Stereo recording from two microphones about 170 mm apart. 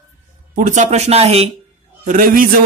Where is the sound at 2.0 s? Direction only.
50° right (ahead or behind).